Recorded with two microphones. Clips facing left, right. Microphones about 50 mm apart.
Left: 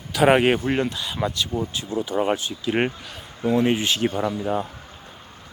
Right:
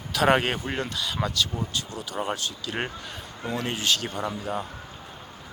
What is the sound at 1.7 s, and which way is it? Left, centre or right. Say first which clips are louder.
Speech: left 7 dB; left.